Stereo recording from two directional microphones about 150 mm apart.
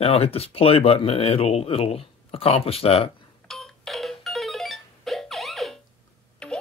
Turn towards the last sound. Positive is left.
turn(degrees=5)  # may be behind; listen again after turning